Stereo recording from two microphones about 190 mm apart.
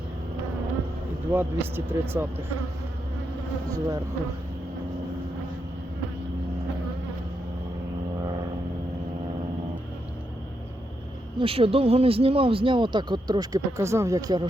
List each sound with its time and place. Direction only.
1.3 s speech: 10° right (ahead or behind)
3.7 s speech: 20° right (ahead or behind)
11.3 s speech: 30° right (ahead or behind)